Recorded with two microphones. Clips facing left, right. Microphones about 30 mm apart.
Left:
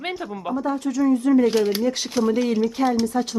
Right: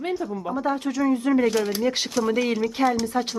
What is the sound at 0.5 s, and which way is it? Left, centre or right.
Speech, right.